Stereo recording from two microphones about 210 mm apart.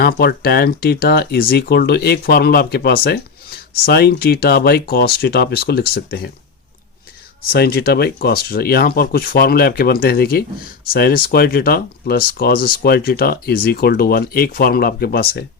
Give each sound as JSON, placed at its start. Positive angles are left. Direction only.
{"t": 0.0, "sound": "speech", "side_deg": 45}
{"t": 7.5, "sound": "speech", "side_deg": 50}